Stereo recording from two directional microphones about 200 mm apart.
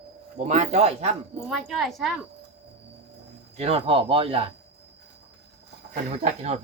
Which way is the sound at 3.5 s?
30° right (ahead or behind).